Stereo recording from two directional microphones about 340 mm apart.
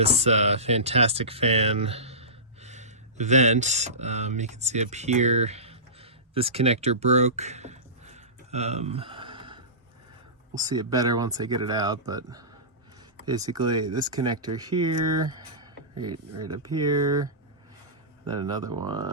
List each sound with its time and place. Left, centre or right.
0.0 s speech: centre
18.3 s speech: centre